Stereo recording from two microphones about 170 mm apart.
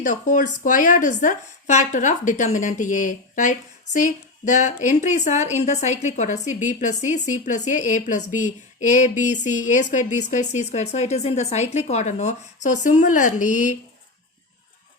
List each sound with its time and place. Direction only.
0.0 s a woman's voice: 50° left (ahead or behind)